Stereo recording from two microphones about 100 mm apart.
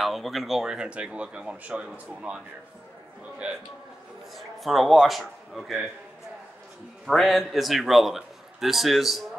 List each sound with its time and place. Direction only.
0.0 s speech: centre (ahead or behind)
3.4 s speech: 10° right (ahead or behind)
4.4 s a man's voice: centre (ahead or behind)
7.1 s a man's voice: centre (ahead or behind)